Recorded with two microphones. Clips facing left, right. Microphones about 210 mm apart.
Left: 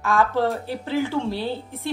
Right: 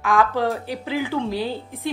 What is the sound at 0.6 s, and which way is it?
Speech, 15° right (ahead or behind).